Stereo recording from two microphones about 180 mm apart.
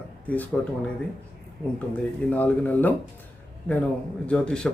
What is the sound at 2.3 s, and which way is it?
Speech, 10° left (ahead or behind).